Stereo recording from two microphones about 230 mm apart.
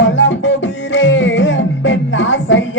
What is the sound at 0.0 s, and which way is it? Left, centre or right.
Beatboxing, left.